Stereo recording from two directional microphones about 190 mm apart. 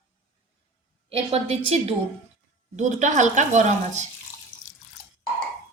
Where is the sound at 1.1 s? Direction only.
30° right (ahead or behind).